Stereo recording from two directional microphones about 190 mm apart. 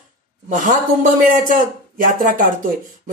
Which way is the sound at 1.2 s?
45° right (ahead or behind).